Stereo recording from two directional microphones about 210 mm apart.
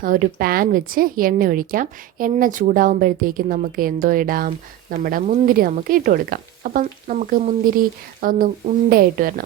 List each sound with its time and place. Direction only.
0.0 s a woman's voice: 40° right (ahead or behind)